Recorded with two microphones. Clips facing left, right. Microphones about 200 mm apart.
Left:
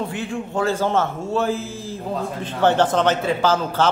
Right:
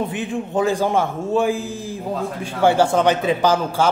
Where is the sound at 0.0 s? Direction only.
20° right (ahead or behind).